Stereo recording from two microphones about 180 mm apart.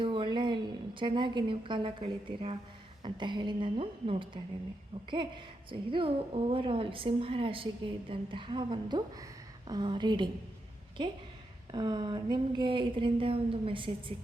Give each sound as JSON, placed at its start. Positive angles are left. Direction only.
{"t": 0.0, "sound": "a woman's voice", "side_deg": -25}
{"t": 11.7, "sound": "a woman's voice", "side_deg": -25}